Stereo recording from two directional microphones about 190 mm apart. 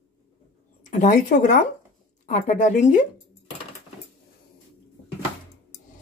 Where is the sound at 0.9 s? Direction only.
40° left (ahead or behind).